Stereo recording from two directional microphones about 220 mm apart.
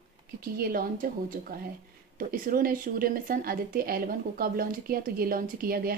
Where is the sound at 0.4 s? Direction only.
40° right (ahead or behind).